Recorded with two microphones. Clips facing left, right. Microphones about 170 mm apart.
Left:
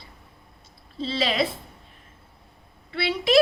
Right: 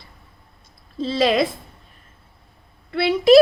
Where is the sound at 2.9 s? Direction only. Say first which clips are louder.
Right 8 dB; 45° right (ahead or behind).